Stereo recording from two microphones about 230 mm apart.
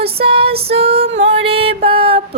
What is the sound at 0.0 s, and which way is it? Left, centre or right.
Music, right.